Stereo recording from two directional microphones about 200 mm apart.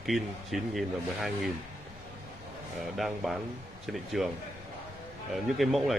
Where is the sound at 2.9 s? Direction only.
Centre (ahead or behind).